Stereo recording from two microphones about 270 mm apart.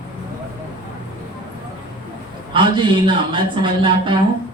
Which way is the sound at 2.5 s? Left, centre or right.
Centre.